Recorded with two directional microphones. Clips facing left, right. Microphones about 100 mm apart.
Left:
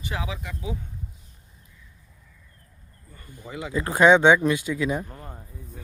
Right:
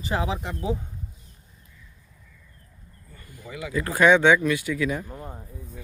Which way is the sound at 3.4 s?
25° left (ahead or behind).